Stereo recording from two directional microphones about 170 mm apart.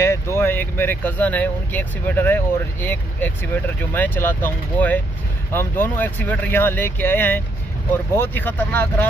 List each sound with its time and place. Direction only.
0.0 s speech: 15° left (ahead or behind)